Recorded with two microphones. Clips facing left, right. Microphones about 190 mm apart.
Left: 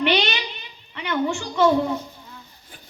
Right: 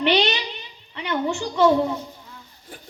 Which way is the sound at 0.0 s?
35° right (ahead or behind).